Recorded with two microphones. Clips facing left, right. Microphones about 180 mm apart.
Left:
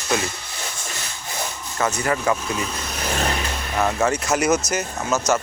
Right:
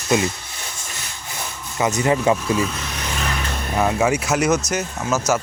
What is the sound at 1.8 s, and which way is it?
Speech, 20° right (ahead or behind).